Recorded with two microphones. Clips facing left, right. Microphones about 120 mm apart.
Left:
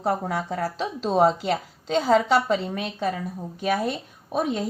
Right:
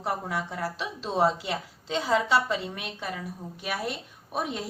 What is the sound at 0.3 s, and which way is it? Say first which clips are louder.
Speech: left 4 dB; 45° left (ahead or behind).